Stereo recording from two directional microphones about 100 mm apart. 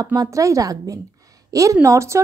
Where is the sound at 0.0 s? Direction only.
40° right (ahead or behind).